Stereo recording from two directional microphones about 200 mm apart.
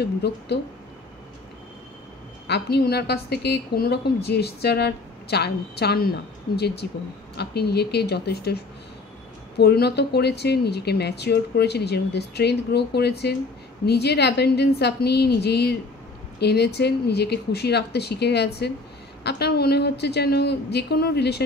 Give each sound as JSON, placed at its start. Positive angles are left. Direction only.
{"t": 0.0, "sound": "speech", "side_deg": 55}
{"t": 2.4, "sound": "a woman's voice", "side_deg": 55}